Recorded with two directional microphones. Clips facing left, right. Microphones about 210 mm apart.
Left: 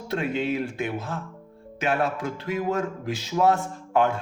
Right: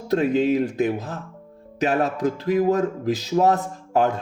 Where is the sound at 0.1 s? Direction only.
40° right (ahead or behind).